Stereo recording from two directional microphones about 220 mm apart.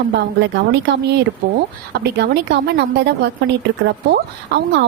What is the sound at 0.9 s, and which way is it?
Speech, 50° right (ahead or behind).